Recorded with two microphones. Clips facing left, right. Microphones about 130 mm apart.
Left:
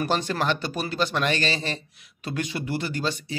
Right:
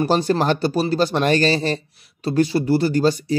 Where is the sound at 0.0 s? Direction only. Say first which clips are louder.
Right 7 dB; 35° right (ahead or behind).